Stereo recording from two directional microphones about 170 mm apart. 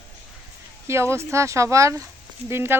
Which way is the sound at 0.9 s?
15° right (ahead or behind).